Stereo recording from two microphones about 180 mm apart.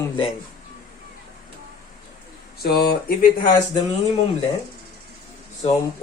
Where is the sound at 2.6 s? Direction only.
60° left (ahead or behind).